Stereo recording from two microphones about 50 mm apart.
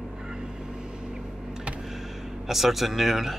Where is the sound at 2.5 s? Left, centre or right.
Centre.